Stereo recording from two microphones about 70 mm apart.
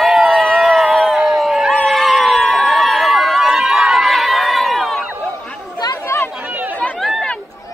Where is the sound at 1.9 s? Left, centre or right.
Centre.